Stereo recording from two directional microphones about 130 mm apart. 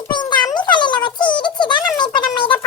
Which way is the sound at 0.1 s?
35° left (ahead or behind).